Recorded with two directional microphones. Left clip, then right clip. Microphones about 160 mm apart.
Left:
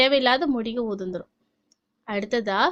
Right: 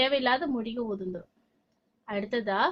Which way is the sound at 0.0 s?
40° left (ahead or behind).